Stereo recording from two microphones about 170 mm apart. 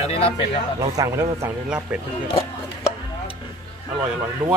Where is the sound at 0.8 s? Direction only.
20° right (ahead or behind).